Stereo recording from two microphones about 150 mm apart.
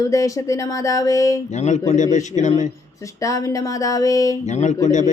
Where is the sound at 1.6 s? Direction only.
50° left (ahead or behind).